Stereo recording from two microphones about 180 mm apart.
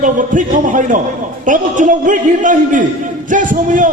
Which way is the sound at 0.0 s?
45° right (ahead or behind).